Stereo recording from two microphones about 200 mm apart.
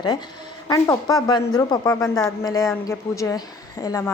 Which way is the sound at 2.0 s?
5° left (ahead or behind).